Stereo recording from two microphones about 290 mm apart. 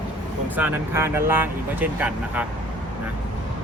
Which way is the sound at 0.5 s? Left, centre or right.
Centre.